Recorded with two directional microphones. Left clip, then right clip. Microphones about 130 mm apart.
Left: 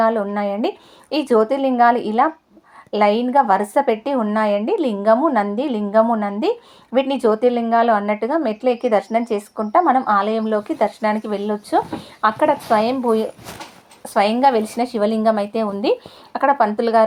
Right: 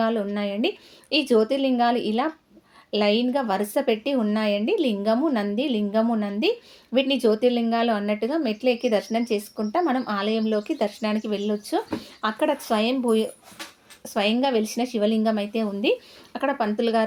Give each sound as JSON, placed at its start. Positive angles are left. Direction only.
{"t": 0.0, "sound": "a woman's voice", "side_deg": 0}
{"t": 14.1, "sound": "a woman's voice", "side_deg": 0}